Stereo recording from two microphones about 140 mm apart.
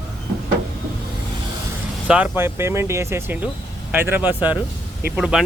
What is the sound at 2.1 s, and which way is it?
Speech, 10° right (ahead or behind).